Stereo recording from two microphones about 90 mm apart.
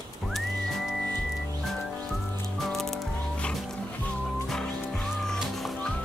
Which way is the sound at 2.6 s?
5° left (ahead or behind).